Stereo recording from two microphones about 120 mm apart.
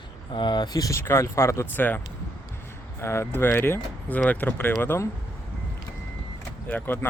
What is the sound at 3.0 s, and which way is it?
Speech, 20° left (ahead or behind).